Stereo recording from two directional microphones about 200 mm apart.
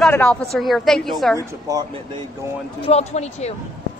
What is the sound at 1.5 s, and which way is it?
Speech, 20° right (ahead or behind).